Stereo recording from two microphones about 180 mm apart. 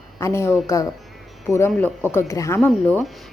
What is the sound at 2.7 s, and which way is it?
Speech, 5° left (ahead or behind).